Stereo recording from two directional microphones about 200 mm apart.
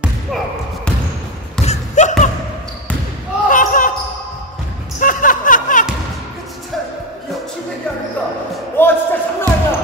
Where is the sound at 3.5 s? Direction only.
40° left (ahead or behind).